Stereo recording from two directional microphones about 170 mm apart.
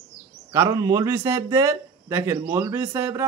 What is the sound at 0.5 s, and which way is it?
A man's voice, 15° right (ahead or behind).